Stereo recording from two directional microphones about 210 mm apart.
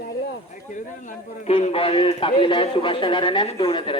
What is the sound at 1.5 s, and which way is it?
A man's voice, 30° left (ahead or behind).